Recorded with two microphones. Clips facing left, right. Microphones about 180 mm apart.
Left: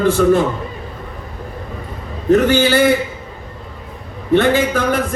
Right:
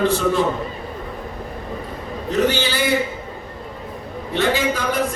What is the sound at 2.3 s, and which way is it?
Speech, 50° left (ahead or behind).